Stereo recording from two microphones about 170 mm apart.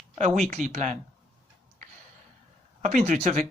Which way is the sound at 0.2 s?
45° right (ahead or behind).